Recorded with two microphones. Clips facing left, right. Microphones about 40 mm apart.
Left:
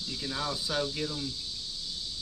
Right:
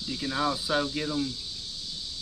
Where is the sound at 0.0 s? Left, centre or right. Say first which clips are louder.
Right 6 dB; centre.